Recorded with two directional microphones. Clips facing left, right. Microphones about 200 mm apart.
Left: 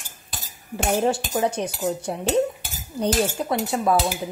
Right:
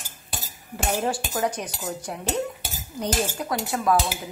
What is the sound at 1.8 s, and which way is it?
Cutlery, 30° left (ahead or behind).